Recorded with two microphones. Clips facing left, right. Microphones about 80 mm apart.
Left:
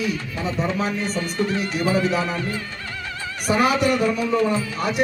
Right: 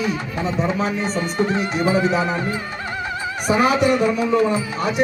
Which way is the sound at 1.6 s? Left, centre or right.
Right.